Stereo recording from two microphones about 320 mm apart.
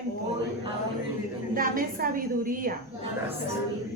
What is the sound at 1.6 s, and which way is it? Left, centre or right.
A woman's voice, right.